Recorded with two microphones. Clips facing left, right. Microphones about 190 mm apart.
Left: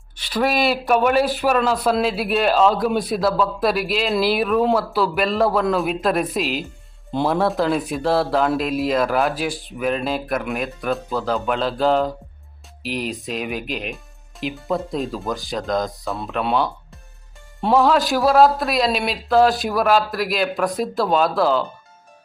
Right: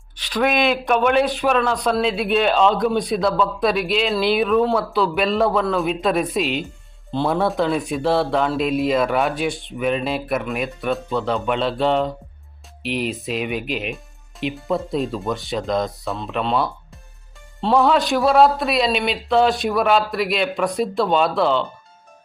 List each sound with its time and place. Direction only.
0.2 s speech: 10° left (ahead or behind)